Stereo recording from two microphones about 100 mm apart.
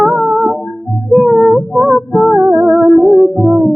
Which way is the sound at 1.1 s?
5° right (ahead or behind).